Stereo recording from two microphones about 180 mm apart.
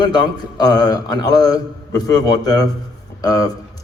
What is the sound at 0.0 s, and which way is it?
A man's voice, 25° left (ahead or behind).